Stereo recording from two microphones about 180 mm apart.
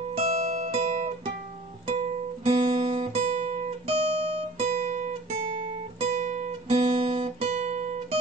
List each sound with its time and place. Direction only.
0.3 s guitar: 55° right (ahead or behind)
2.4 s guitar: 30° right (ahead or behind)